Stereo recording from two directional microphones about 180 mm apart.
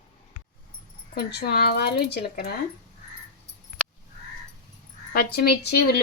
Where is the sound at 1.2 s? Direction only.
60° left (ahead or behind).